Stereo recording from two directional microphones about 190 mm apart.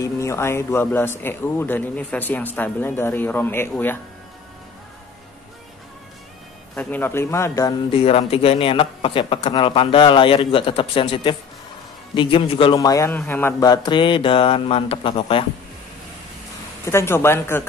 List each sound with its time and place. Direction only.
0.0 s speech: 15° left (ahead or behind)
6.7 s speech: 10° left (ahead or behind)
8.0 s speech: 30° left (ahead or behind)
16.8 s speech: 15° left (ahead or behind)